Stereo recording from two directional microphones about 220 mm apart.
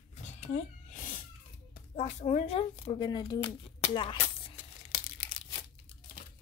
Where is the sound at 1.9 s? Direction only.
30° left (ahead or behind).